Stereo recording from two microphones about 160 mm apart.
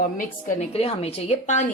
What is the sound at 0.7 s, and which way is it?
Speech, 40° left (ahead or behind).